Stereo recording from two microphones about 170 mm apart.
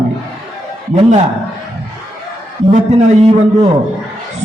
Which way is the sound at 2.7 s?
40° right (ahead or behind).